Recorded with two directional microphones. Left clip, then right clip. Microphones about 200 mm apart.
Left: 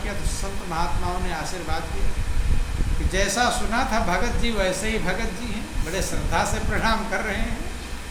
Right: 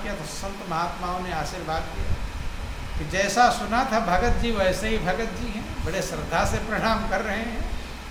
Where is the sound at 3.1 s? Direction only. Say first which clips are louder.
Right 3 dB; 10° right (ahead or behind).